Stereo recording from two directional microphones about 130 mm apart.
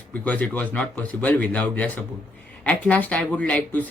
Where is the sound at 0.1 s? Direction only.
10° left (ahead or behind).